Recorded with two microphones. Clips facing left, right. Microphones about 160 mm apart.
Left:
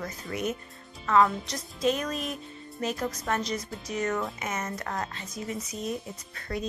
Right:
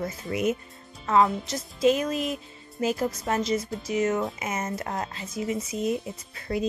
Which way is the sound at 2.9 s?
30° right (ahead or behind).